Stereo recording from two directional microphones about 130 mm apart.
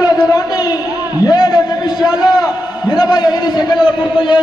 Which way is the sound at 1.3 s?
30° left (ahead or behind).